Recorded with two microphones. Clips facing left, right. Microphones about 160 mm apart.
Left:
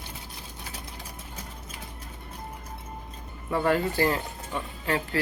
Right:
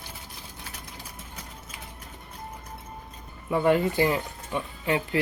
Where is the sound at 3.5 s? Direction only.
15° right (ahead or behind).